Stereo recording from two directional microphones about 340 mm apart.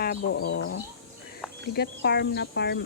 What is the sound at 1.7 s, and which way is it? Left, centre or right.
Cricket, left.